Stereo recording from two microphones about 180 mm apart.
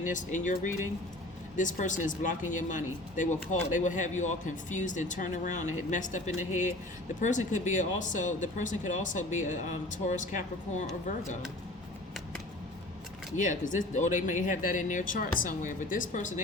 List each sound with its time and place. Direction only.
0.0 s speech: 45° left (ahead or behind)
13.3 s speech: 45° left (ahead or behind)